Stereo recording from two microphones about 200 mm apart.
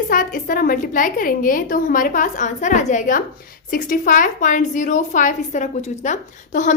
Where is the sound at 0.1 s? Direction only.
45° left (ahead or behind).